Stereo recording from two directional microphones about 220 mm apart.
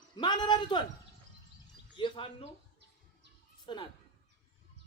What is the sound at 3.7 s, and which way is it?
Speech, 20° left (ahead or behind).